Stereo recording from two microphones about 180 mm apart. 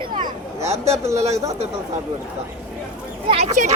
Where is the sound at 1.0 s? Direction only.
15° right (ahead or behind).